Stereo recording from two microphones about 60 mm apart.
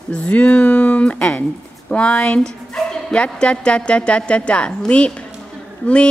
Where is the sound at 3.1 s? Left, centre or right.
Centre.